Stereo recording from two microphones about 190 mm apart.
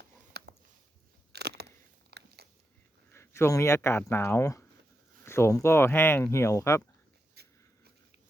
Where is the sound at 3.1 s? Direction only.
15° left (ahead or behind).